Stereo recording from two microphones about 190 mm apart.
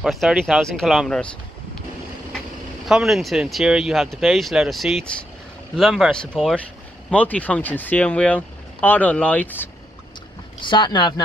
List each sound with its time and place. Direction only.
0.0 s speech: centre (ahead or behind)
2.9 s speech: 5° right (ahead or behind)
10.6 s speech: 25° left (ahead or behind)